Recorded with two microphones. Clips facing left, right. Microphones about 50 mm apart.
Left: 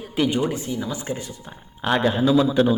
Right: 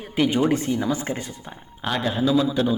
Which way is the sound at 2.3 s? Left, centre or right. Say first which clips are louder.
Left 2 dB; left.